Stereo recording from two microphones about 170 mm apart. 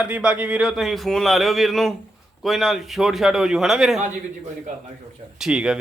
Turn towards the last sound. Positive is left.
turn(degrees=-5)  # may be behind; listen again after turning